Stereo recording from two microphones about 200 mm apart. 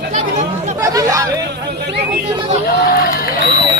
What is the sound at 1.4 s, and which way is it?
Speech, 60° right (ahead or behind).